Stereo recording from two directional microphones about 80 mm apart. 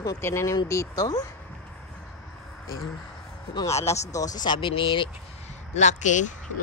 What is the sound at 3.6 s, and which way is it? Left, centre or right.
Speech, left.